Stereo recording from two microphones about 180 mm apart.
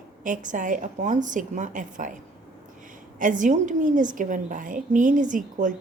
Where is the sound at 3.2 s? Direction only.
45° right (ahead or behind).